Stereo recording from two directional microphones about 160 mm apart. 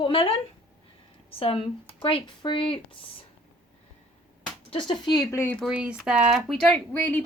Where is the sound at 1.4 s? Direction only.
35° left (ahead or behind).